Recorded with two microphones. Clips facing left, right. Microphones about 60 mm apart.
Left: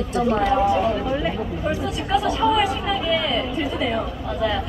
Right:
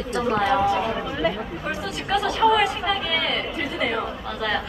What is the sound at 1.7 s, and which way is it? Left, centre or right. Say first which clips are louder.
Speech: left 2 dB; right.